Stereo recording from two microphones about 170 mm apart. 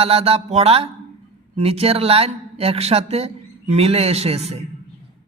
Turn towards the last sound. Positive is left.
turn(degrees=-40)  # may be behind; listen again after turning